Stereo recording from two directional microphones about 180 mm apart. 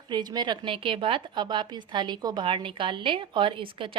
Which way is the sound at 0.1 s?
25° right (ahead or behind).